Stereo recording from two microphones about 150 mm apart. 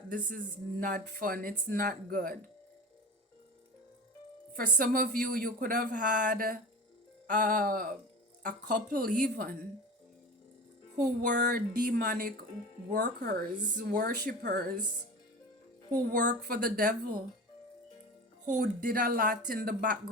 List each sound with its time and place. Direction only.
0.1 s speech: 65° right (ahead or behind)
4.5 s speech: 70° right (ahead or behind)
10.9 s speech: 80° right
16.5 s speech: 75° right (ahead or behind)
18.4 s speech: 70° right (ahead or behind)